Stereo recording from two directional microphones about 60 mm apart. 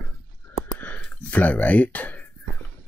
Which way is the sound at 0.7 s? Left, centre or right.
Left.